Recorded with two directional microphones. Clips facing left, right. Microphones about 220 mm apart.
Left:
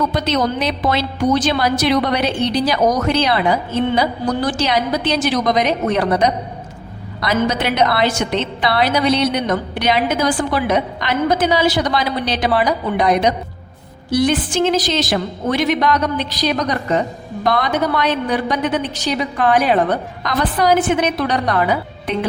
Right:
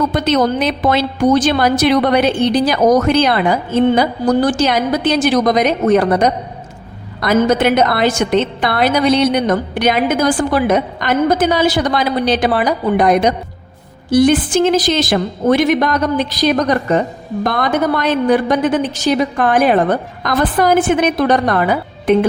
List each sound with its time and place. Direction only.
0.1 s a woman's voice: 50° right (ahead or behind)